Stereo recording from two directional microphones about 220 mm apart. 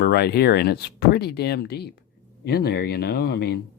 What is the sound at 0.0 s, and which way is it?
Speech, 45° left (ahead or behind).